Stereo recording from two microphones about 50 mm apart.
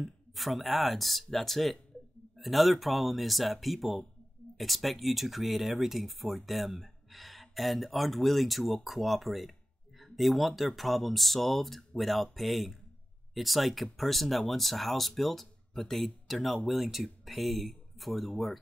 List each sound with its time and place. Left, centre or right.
0.3 s speech: centre